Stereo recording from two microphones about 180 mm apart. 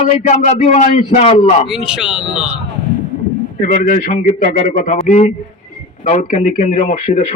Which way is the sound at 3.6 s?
45° left (ahead or behind).